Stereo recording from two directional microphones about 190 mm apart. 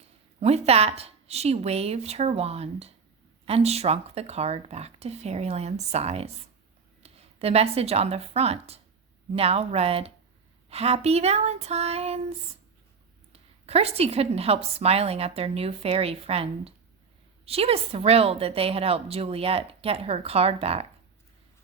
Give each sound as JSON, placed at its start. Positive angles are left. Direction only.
{"t": 0.3, "sound": "a woman's voice", "side_deg": -35}
{"t": 13.3, "sound": "a woman's voice", "side_deg": -30}